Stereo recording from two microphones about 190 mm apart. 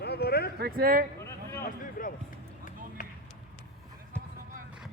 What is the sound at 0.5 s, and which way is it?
Speech, 55° right (ahead or behind).